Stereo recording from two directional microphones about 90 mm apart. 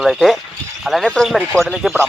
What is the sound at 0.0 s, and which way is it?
Speech, centre (ahead or behind).